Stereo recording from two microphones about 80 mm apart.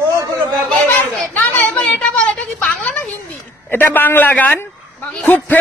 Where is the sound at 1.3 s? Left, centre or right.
Left.